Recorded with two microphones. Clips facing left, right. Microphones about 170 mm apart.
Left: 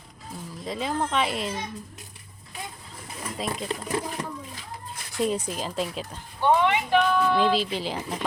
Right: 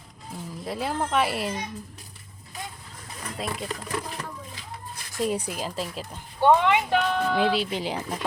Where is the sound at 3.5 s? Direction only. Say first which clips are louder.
Left 3 dB; 30° left (ahead or behind).